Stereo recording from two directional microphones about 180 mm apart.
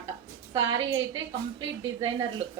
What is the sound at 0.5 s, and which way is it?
A woman's voice, 25° right (ahead or behind).